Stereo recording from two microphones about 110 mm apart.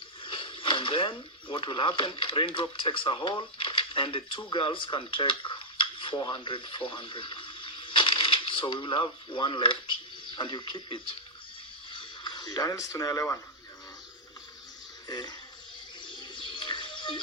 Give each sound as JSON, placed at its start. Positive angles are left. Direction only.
{"t": 0.2, "sound": "speech", "side_deg": 50}
{"t": 15.0, "sound": "speech", "side_deg": 40}
{"t": 16.0, "sound": "bird", "side_deg": 45}